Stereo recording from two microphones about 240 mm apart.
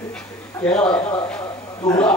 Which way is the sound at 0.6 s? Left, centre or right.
Centre.